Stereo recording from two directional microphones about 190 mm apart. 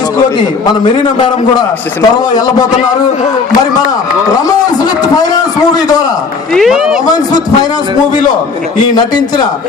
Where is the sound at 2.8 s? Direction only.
35° left (ahead or behind).